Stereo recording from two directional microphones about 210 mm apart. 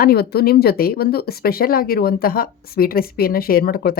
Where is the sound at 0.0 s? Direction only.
45° left (ahead or behind).